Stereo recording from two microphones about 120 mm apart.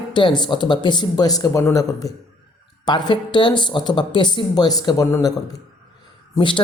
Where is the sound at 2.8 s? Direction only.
40° left (ahead or behind).